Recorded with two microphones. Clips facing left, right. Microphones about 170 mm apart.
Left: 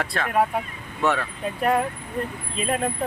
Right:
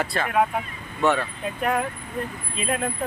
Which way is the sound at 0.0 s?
Centre (ahead or behind).